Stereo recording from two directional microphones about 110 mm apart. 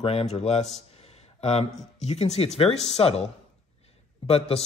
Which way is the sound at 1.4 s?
70° left (ahead or behind).